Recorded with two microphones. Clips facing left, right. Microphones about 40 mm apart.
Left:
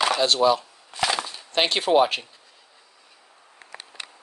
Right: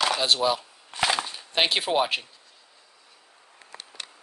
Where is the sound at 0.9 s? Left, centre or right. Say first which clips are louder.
Even; right.